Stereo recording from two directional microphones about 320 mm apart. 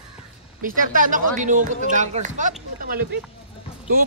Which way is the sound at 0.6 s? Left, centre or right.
Right.